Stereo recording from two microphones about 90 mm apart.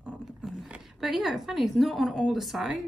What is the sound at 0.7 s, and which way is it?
Speech, 5° right (ahead or behind).